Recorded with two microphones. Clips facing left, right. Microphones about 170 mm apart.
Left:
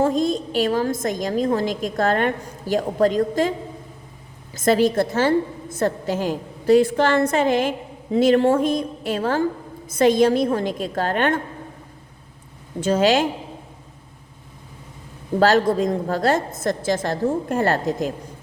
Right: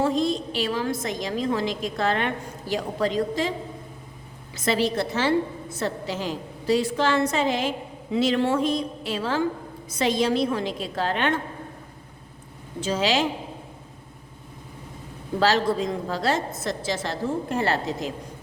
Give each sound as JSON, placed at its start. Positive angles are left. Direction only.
{"t": 0.0, "sound": "a woman's voice", "side_deg": 45}
{"t": 4.5, "sound": "a woman's voice", "side_deg": 45}
{"t": 12.8, "sound": "a woman's voice", "side_deg": 50}
{"t": 15.4, "sound": "a woman's voice", "side_deg": 50}